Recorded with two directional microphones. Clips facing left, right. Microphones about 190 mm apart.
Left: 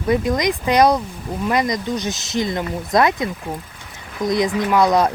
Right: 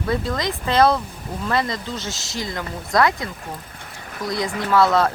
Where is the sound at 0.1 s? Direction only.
15° left (ahead or behind).